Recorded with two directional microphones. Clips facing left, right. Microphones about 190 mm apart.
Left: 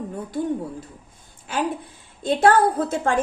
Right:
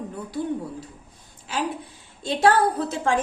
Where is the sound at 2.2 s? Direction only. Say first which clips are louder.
Left 2 dB; 50° left (ahead or behind).